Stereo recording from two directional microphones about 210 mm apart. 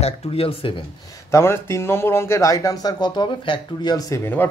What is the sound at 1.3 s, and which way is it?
Speech, 10° left (ahead or behind).